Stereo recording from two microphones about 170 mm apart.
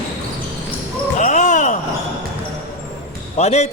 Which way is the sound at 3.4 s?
40° left (ahead or behind).